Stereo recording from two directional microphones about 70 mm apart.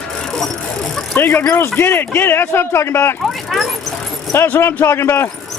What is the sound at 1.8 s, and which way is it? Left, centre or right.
Speech, left.